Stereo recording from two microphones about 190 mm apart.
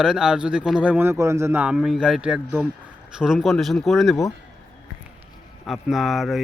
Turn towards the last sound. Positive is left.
turn(degrees=0)  # may be behind; listen again after turning